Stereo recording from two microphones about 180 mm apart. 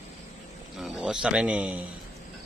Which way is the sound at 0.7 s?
Centre (ahead or behind).